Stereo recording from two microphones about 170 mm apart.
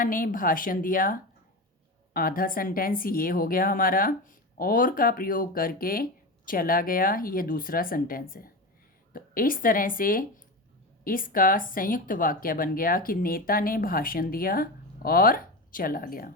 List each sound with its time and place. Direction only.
0.0 s a woman's voice: 55° left (ahead or behind)